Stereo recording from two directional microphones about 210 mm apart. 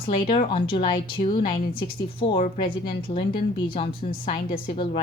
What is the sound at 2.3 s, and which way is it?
Speech, 40° left (ahead or behind).